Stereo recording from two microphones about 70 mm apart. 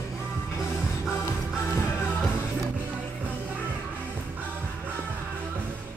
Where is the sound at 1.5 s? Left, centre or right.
Centre.